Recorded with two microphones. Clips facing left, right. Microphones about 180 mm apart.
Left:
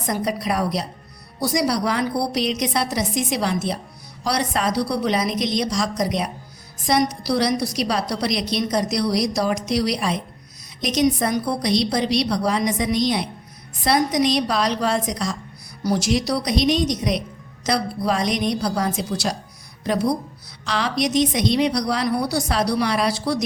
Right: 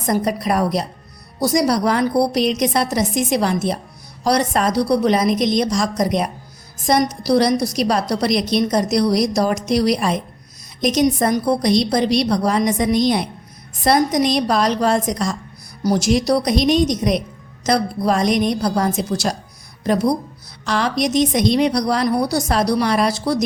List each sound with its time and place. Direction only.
0.0 s a woman's voice: 45° right (ahead or behind)